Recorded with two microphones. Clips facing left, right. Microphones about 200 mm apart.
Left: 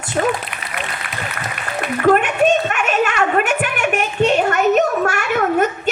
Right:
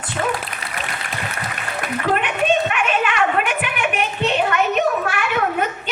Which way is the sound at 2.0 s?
45° left (ahead or behind).